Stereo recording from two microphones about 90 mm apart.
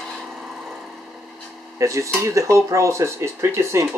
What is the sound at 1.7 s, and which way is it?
Speech, 35° right (ahead or behind).